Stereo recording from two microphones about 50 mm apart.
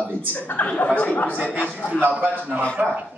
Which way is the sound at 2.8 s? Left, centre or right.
Right.